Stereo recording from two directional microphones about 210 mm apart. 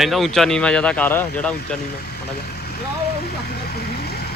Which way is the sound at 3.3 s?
50° left (ahead or behind).